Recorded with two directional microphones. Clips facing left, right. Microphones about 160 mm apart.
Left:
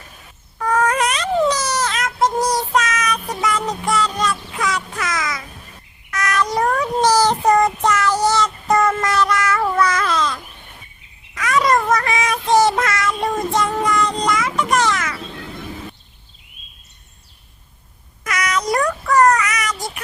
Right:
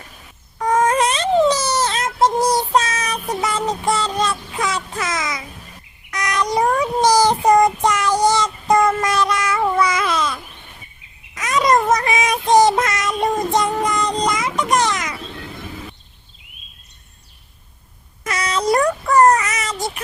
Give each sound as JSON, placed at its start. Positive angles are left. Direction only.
{"t": 0.6, "sound": "a sound", "side_deg": -25}
{"t": 6.1, "sound": "child singing", "side_deg": -15}
{"t": 18.2, "sound": "child singing", "side_deg": -30}